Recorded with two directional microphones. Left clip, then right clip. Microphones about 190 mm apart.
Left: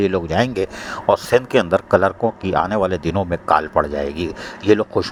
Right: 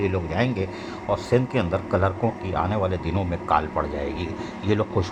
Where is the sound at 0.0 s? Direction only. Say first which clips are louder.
Left 7 dB; 40° left (ahead or behind).